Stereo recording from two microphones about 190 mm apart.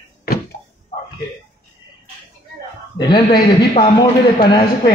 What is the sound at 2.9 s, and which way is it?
A woman's voice, 25° left (ahead or behind).